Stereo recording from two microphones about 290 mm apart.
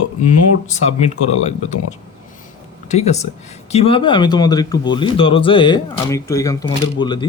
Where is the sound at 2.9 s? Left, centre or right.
Left.